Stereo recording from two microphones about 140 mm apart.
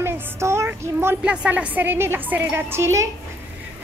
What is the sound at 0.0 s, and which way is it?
A woman's voice, 20° right (ahead or behind).